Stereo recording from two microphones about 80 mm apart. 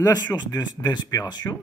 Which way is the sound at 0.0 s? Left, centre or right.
Left.